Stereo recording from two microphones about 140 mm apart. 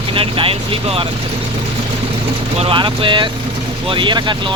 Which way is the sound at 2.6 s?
40° right (ahead or behind).